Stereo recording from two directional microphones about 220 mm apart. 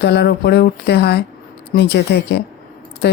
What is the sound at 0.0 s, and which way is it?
Speech, 50° left (ahead or behind).